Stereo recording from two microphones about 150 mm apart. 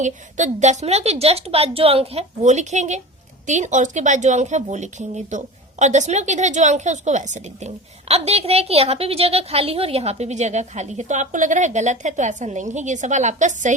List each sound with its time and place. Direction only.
0.0 s a woman's voice: 50° right (ahead or behind)